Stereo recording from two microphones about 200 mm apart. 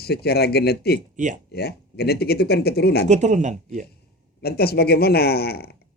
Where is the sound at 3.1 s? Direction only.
35° right (ahead or behind).